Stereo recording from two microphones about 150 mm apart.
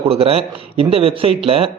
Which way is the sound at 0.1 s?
40° right (ahead or behind).